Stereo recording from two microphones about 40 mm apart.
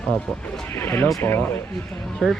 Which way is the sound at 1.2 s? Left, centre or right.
Left.